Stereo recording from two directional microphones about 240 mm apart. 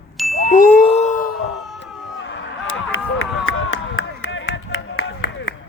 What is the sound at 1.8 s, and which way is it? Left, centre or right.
Run, left.